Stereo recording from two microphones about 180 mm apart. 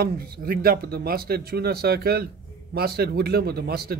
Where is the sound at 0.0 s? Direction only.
55° right (ahead or behind).